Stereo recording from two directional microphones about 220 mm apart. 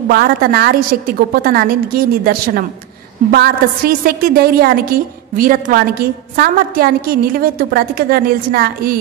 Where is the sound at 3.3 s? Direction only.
45° right (ahead or behind).